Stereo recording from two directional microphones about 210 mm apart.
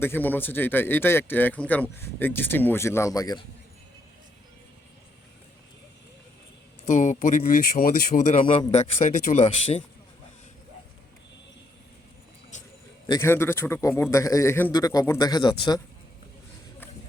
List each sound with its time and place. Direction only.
0.0 s a man's voice: 10° left (ahead or behind)
6.8 s speech: 35° left (ahead or behind)
13.1 s a man's voice: 15° left (ahead or behind)